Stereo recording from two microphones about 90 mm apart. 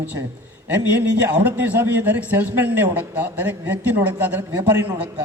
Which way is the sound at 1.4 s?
15° right (ahead or behind).